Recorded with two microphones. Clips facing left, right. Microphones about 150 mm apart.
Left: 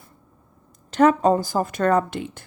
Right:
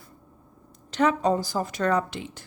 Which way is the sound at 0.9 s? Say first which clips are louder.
Left 6 dB; 50° left (ahead or behind).